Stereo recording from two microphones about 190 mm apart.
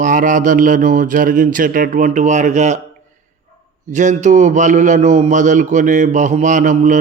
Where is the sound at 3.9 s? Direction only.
40° right (ahead or behind).